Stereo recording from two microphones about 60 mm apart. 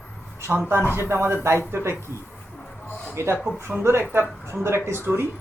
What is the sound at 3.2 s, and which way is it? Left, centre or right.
A man's voice, right.